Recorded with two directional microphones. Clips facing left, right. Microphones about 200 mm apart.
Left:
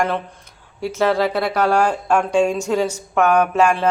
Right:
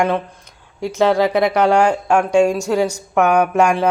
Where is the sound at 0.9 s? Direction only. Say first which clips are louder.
Right 4 dB; 15° right (ahead or behind).